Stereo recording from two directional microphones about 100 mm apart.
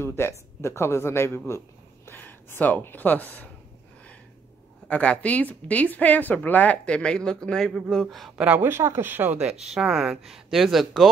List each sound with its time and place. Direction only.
0.0 s a man's voice: 25° left (ahead or behind)
4.8 s a woman's voice: 10° left (ahead or behind)
8.4 s speech: 15° right (ahead or behind)